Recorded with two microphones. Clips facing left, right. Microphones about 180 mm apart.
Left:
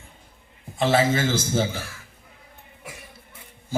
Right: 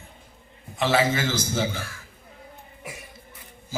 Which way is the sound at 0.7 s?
30° left (ahead or behind).